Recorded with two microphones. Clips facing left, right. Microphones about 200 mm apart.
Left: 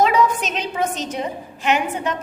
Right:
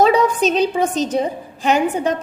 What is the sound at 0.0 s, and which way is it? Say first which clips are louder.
A woman's voice: right 4 dB; 35° right (ahead or behind).